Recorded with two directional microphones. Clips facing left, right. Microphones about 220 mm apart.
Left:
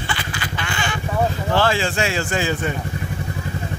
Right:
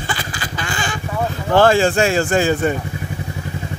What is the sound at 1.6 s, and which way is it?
Speech, 50° right (ahead or behind).